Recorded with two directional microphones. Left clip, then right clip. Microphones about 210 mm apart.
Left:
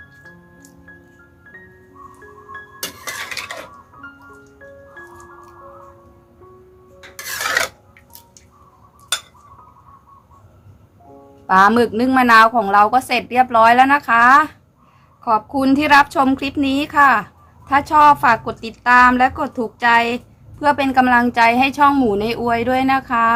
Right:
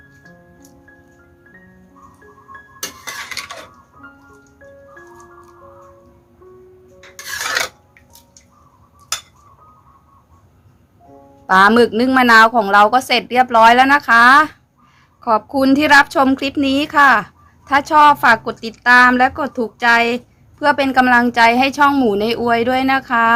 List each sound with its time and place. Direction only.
2.8 s stir: 10° right (ahead or behind)
7.3 s filing: 10° right (ahead or behind)
11.4 s a woman's voice: 30° right (ahead or behind)